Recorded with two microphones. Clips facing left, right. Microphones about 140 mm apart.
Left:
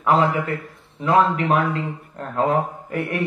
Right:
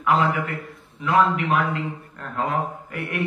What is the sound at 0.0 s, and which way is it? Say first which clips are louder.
A man's voice: left 2 dB; 35° left (ahead or behind).